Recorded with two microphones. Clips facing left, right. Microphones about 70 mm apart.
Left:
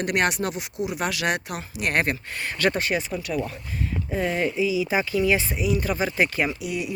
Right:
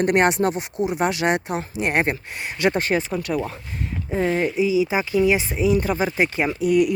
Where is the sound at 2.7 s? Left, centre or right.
Right.